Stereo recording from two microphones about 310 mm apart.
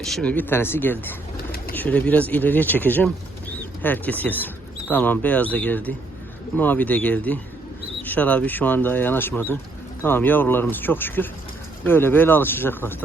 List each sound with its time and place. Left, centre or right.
0.0 s speech: centre